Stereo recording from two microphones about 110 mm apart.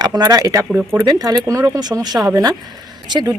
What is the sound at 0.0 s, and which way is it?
Speech, 35° right (ahead or behind).